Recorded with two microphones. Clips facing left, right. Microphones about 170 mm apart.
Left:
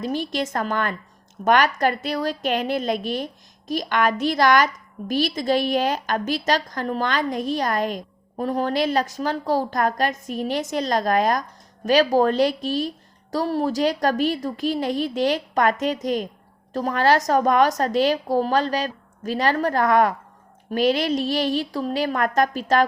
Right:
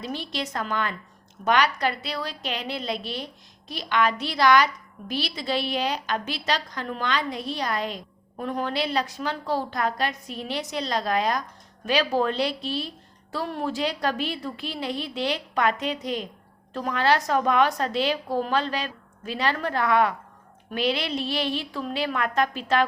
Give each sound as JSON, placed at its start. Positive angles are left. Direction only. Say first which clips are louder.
{"t": 0.0, "sound": "a woman's voice", "louder": "left 6 dB", "side_deg": 45}